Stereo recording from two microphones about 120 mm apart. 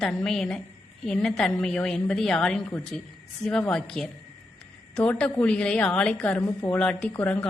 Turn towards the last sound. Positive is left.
turn(degrees=15)  # may be behind; listen again after turning